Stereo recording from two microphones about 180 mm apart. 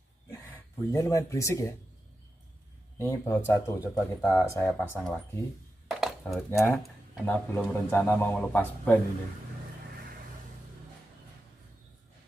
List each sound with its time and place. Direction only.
0.3 s a man's voice: 15° left (ahead or behind)
3.0 s speech: 15° left (ahead or behind)
5.9 s a sound: centre (ahead or behind)
6.6 s speech: 5° left (ahead or behind)